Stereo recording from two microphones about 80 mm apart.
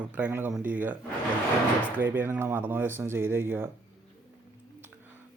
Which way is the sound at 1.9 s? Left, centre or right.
Right.